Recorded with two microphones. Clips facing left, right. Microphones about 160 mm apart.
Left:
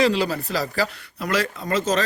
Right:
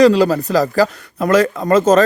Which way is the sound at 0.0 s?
40° right (ahead or behind).